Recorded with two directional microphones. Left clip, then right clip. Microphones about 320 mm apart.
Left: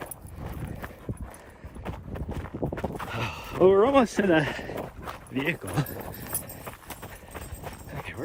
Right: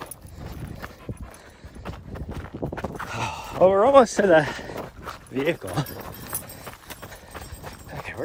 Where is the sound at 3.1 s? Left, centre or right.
Centre.